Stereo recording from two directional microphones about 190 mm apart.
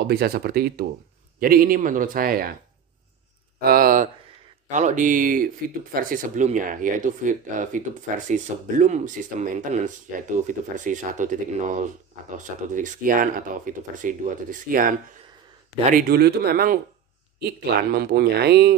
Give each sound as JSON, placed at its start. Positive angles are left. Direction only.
{"t": 0.0, "sound": "speech", "side_deg": -55}
{"t": 3.6, "sound": "speech", "side_deg": -50}
{"t": 17.9, "sound": "speech", "side_deg": -60}